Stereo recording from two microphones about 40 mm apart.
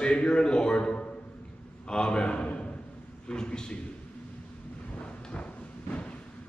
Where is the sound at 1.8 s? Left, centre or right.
Left.